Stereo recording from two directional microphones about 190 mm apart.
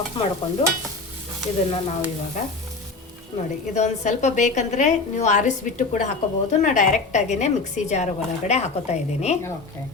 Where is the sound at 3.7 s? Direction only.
40° left (ahead or behind).